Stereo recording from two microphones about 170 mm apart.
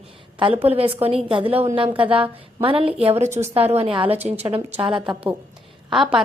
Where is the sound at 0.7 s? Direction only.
35° right (ahead or behind).